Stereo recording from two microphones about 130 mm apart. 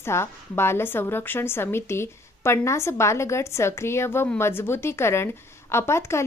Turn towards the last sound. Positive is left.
turn(degrees=20)  # may be behind; listen again after turning